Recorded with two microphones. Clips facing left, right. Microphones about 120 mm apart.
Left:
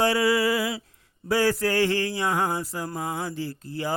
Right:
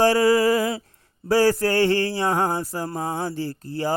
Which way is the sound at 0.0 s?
40° right (ahead or behind).